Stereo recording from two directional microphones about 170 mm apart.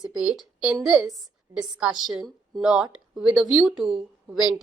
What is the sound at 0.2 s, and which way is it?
A woman's voice, 5° right (ahead or behind).